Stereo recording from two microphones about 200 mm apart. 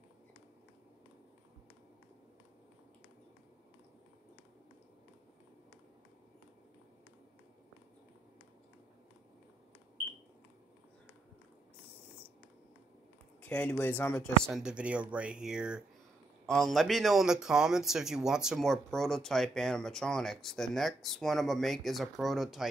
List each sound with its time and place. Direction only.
13.4 s speech: 5° left (ahead or behind)